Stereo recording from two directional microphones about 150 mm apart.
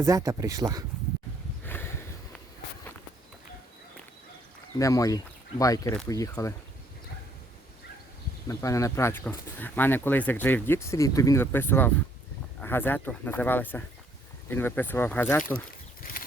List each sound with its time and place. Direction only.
0.0 s speech: 20° right (ahead or behind)
1.6 s a sound: 15° left (ahead or behind)
4.8 s speech: 20° left (ahead or behind)
8.4 s speech: 20° left (ahead or behind)